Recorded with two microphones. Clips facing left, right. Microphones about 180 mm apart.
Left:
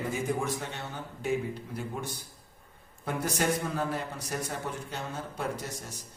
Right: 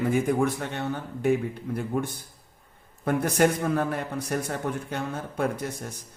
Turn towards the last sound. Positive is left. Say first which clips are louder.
# right 6 dB
turn(degrees=-55)  # may be behind; listen again after turning